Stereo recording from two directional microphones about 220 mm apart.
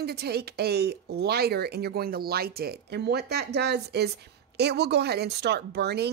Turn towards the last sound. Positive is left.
turn(degrees=-50)  # may be behind; listen again after turning